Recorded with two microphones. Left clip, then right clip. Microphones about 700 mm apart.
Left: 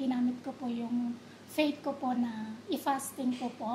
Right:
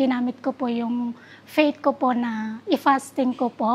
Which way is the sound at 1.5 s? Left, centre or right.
Right.